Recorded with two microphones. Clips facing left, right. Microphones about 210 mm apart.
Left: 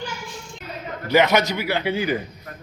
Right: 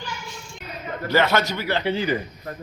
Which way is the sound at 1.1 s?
15° left (ahead or behind).